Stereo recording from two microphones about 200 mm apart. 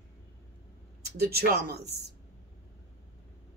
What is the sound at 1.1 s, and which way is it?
Speech, 50° right (ahead or behind).